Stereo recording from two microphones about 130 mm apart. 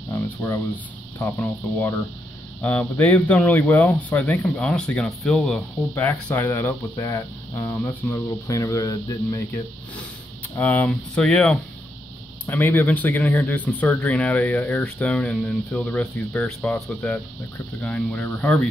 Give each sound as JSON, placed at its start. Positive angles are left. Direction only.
{"t": 0.1, "sound": "a sound", "side_deg": 20}
{"t": 1.2, "sound": "speech", "side_deg": 15}
{"t": 10.5, "sound": "speech", "side_deg": 15}